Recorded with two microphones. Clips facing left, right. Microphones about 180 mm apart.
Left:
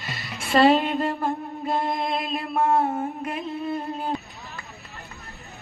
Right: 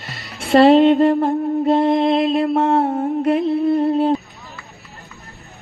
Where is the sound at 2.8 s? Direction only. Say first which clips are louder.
Right 6 dB; 40° right (ahead or behind).